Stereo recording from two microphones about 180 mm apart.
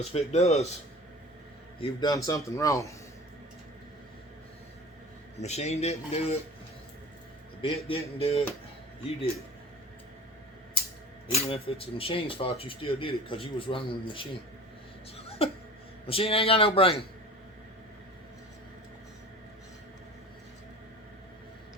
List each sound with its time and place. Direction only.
0.0 s speech: 35° left (ahead or behind)
1.8 s a man's voice: 20° left (ahead or behind)
5.4 s speech: 35° left (ahead or behind)
7.6 s speech: 30° left (ahead or behind)
11.4 s speech: 30° left (ahead or behind)
15.4 s speech: 30° left (ahead or behind)